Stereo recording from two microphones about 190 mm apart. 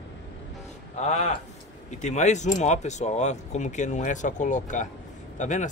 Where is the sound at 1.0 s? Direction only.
35° left (ahead or behind).